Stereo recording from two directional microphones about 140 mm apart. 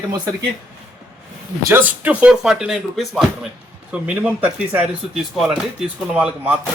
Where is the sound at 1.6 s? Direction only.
15° right (ahead or behind).